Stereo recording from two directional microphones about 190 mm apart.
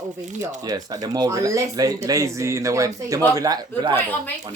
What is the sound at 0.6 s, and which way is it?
Speech, 20° right (ahead or behind).